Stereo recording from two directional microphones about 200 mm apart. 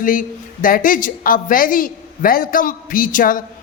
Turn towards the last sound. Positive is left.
turn(degrees=45)  # may be behind; listen again after turning